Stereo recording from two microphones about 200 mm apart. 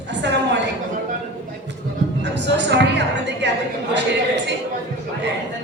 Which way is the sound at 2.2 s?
60° right (ahead or behind).